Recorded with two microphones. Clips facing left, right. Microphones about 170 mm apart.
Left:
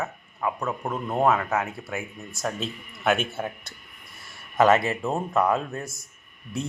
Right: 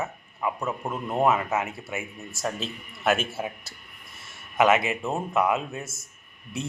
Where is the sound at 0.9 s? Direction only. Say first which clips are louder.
Even; 5° left (ahead or behind).